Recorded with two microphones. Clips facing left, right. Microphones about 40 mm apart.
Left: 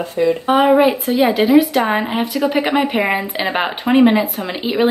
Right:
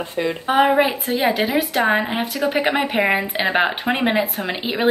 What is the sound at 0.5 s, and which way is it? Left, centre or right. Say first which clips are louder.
Speech: left 3 dB; centre.